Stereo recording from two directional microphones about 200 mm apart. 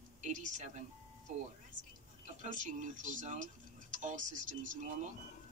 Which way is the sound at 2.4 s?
40° right (ahead or behind).